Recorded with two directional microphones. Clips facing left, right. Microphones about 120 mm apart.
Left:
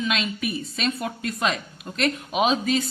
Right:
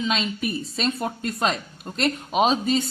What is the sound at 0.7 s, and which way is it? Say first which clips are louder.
A man's voice: right 1 dB; 30° right (ahead or behind).